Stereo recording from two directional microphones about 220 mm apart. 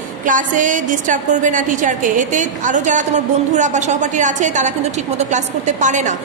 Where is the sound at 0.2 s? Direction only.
35° right (ahead or behind).